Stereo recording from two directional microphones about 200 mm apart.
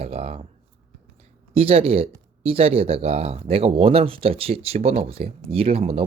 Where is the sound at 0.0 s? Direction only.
30° right (ahead or behind).